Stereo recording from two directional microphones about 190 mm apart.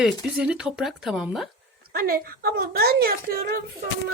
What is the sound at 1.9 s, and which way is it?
A woman's voice, 50° right (ahead or behind).